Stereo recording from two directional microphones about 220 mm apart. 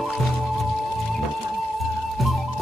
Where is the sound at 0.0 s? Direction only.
Centre (ahead or behind).